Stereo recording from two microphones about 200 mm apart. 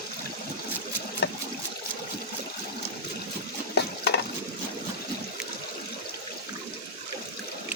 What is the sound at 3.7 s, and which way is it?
Stir, 55° left (ahead or behind).